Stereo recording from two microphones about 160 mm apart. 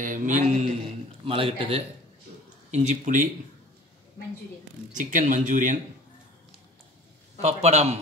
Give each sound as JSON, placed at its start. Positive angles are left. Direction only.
{"t": 0.0, "sound": "speech", "side_deg": -55}
{"t": 1.2, "sound": "a man's voice", "side_deg": -35}
{"t": 2.7, "sound": "speech", "side_deg": -50}
{"t": 4.9, "sound": "speech", "side_deg": -55}
{"t": 7.4, "sound": "speech", "side_deg": -45}